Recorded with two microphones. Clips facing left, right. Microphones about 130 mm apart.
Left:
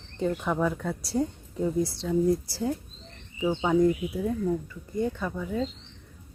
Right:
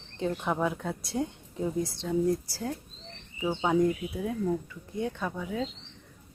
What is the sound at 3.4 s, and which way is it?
Speech, 5° right (ahead or behind).